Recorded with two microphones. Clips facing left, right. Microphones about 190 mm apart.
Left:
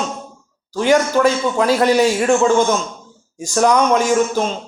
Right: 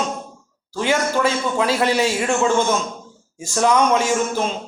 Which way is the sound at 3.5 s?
40° left (ahead or behind).